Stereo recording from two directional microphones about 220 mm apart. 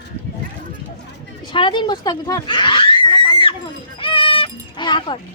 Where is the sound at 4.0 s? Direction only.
25° left (ahead or behind).